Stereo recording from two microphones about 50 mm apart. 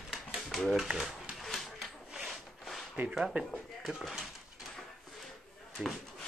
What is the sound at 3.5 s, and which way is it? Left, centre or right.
Speech, centre.